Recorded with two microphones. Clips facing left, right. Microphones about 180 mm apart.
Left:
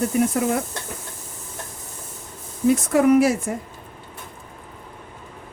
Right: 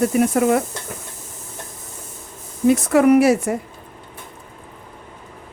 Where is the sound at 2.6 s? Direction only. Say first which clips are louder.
Right 3 dB; 70° right (ahead or behind).